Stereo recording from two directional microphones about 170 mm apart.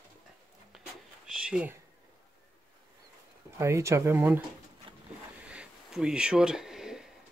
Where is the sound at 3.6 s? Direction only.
15° right (ahead or behind).